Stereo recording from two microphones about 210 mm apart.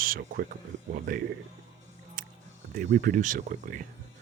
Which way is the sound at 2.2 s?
40° right (ahead or behind).